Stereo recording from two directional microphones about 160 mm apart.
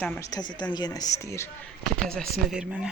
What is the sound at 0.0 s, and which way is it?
Speech, 10° left (ahead or behind).